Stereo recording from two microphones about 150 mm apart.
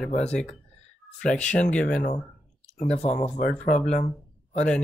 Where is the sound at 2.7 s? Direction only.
50° left (ahead or behind).